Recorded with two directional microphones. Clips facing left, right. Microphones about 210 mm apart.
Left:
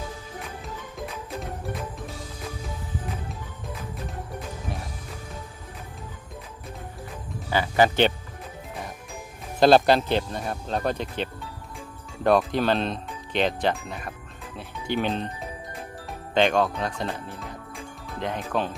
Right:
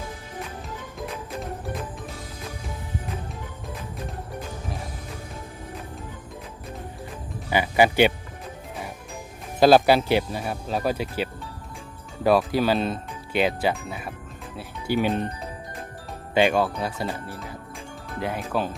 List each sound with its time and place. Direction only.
7.5 s speech: 10° right (ahead or behind)
9.6 s speech: 5° right (ahead or behind)
16.3 s speech: 5° right (ahead or behind)